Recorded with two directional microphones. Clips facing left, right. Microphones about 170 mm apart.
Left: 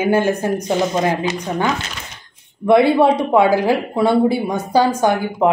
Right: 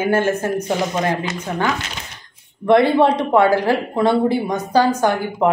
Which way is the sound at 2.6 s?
10° left (ahead or behind).